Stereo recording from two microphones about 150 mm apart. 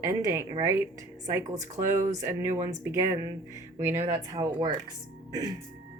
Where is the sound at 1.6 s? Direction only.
55° right (ahead or behind).